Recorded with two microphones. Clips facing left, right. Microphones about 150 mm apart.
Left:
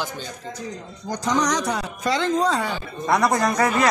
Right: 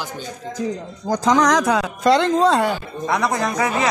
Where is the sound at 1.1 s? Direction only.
90° right; by 2.7 s 65° right (ahead or behind).